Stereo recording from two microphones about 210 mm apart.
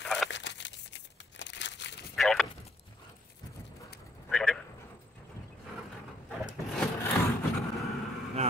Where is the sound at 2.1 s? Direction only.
Centre (ahead or behind).